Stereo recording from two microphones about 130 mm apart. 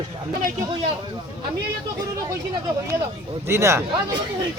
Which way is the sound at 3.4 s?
20° right (ahead or behind).